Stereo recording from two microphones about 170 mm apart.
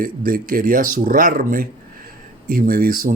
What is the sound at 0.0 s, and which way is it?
Speech, 55° right (ahead or behind).